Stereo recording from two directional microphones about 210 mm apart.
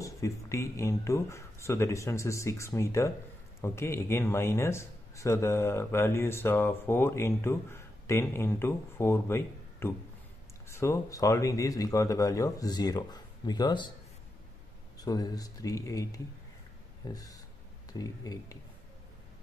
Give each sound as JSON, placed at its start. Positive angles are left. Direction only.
{"t": 0.0, "sound": "speech", "side_deg": 15}
{"t": 15.0, "sound": "speech", "side_deg": 20}